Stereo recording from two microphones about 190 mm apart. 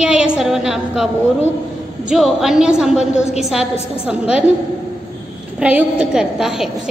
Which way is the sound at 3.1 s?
35° left (ahead or behind).